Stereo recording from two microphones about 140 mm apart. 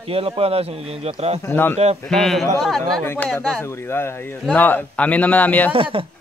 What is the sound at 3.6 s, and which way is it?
Speech, 20° left (ahead or behind).